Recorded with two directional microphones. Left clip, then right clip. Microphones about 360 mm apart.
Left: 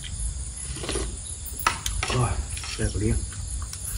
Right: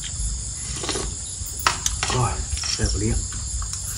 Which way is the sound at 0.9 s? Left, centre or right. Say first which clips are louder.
Right 3 dB; centre.